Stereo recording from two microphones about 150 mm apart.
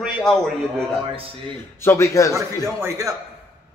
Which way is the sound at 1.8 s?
20° left (ahead or behind).